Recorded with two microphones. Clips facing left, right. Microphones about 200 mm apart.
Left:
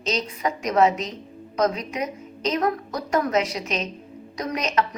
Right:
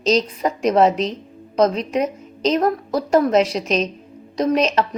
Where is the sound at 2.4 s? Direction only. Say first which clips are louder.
Right 5 dB; 30° right (ahead or behind).